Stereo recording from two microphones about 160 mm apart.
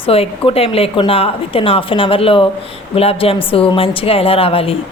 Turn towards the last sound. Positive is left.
turn(degrees=35)  # may be behind; listen again after turning